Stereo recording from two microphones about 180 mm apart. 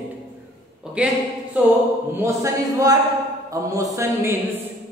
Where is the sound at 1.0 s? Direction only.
5° right (ahead or behind).